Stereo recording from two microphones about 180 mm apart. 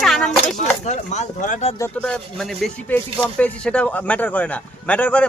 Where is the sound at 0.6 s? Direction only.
40° left (ahead or behind).